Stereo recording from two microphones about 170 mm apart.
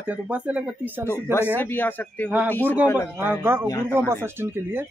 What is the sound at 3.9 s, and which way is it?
Speech, 15° right (ahead or behind).